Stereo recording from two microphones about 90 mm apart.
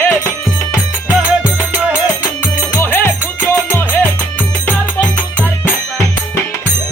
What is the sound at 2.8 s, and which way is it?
Music, 20° left (ahead or behind).